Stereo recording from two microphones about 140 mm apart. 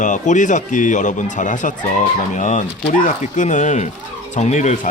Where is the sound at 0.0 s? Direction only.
60° left (ahead or behind).